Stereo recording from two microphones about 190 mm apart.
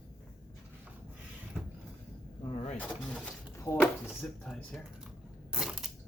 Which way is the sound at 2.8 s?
10° left (ahead or behind).